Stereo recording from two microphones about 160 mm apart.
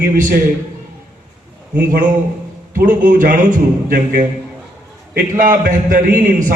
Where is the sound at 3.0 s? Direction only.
55° right (ahead or behind).